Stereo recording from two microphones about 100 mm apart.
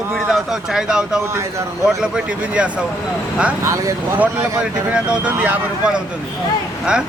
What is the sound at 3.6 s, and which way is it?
Speech, 30° right (ahead or behind).